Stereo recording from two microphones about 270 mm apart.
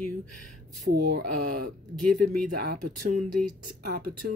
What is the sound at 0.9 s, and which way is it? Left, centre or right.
Speech, right.